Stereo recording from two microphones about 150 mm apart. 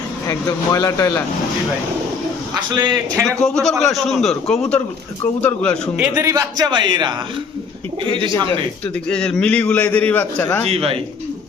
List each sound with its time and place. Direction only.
0.3 s speech: 20° left (ahead or behind)
2.7 s a man's voice: 30° right (ahead or behind)
3.2 s a man's voice: 5° left (ahead or behind)
6.0 s speech: 10° right (ahead or behind)
6.3 s a man's voice: 25° right (ahead or behind)
9.0 s a man's voice: 5° left (ahead or behind)
10.7 s speech: 40° right (ahead or behind)